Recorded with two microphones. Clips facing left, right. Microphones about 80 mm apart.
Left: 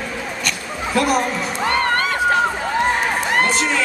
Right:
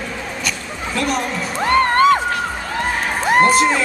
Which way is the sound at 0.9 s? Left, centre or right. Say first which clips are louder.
Left 3 dB; centre.